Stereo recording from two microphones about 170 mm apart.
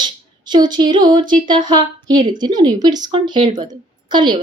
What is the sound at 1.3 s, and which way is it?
A woman's voice, 25° right (ahead or behind).